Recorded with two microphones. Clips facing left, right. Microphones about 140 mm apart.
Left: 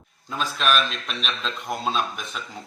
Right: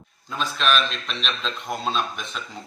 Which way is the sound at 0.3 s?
5° left (ahead or behind).